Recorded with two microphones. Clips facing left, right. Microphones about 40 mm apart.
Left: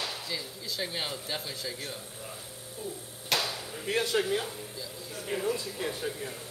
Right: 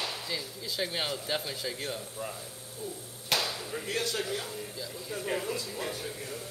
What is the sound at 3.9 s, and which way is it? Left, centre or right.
Speech, centre.